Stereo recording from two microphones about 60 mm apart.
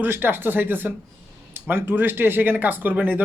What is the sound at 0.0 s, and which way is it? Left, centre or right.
Speech, right.